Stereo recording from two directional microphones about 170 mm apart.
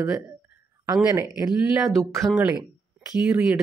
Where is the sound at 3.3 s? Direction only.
5° right (ahead or behind).